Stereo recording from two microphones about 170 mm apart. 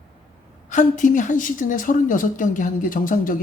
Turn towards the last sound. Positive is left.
turn(degrees=55)  # may be behind; listen again after turning